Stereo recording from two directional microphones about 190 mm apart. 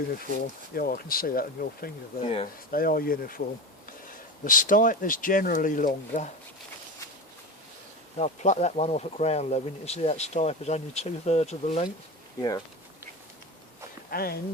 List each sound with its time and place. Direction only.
0.7 s speech: 50° left (ahead or behind)
2.2 s speech: 30° left (ahead or behind)
2.7 s speech: 50° left (ahead or behind)
4.4 s speech: 45° left (ahead or behind)
8.2 s speech: 40° left (ahead or behind)
12.4 s speech: 20° left (ahead or behind)
14.1 s speech: 50° left (ahead or behind)